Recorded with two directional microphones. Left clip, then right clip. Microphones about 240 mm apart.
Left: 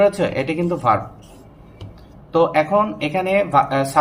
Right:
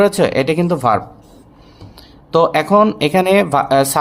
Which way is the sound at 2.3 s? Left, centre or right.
Right.